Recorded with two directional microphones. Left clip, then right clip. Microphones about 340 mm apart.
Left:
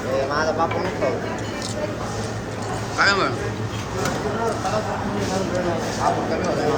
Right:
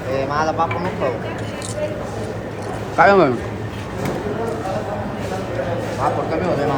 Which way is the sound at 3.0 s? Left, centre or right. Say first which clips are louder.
Right 7 dB; centre.